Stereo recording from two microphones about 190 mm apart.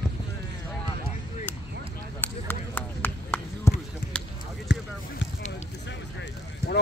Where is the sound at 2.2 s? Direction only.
10° left (ahead or behind).